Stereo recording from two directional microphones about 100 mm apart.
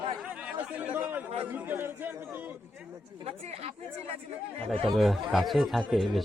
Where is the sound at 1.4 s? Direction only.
20° right (ahead or behind).